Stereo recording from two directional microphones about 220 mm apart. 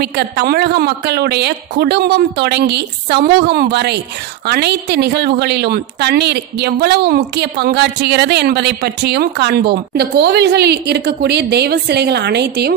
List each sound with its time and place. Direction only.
0.0 s a woman's voice: 45° right (ahead or behind)